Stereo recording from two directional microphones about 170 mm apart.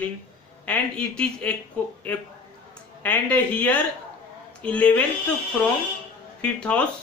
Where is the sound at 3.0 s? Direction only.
10° left (ahead or behind).